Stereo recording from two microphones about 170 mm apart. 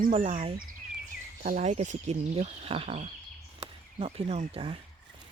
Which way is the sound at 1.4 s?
45° right (ahead or behind).